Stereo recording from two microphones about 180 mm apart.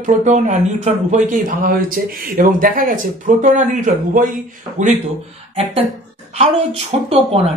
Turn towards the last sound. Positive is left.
turn(degrees=-35)  # may be behind; listen again after turning